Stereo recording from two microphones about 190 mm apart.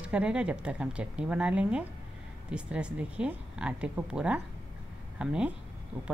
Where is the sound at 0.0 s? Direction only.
5° right (ahead or behind).